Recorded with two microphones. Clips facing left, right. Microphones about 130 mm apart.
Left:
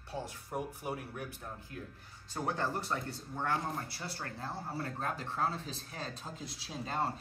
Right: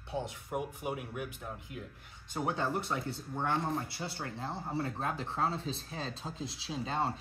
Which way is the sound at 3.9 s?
25° right (ahead or behind).